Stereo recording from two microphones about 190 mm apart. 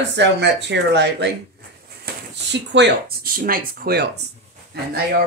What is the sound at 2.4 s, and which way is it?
Speech, 60° right (ahead or behind).